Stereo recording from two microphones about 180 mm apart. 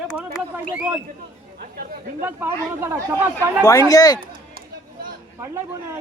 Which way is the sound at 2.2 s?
15° right (ahead or behind).